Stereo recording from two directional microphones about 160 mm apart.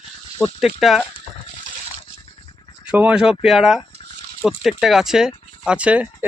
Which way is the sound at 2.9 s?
10° right (ahead or behind).